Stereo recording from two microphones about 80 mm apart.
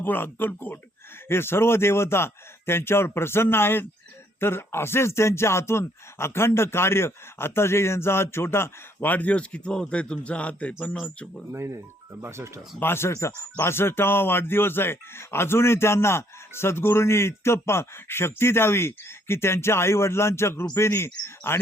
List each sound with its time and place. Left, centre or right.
0.0 s speech: left
11.5 s speech: right
12.8 s speech: left